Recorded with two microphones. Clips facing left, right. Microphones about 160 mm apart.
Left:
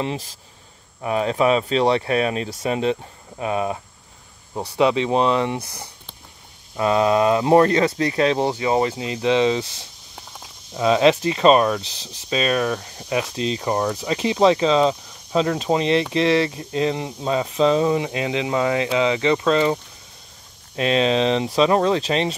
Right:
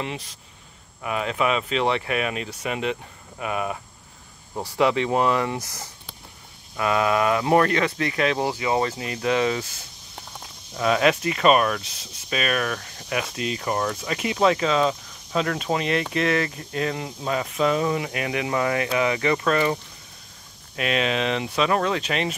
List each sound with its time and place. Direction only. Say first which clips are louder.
1.0 s speech: left 5 dB; 30° left (ahead or behind)
6.8 s speech: left 4 dB; 25° left (ahead or behind)